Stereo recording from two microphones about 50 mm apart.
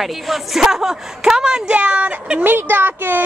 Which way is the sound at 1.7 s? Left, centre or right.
Right.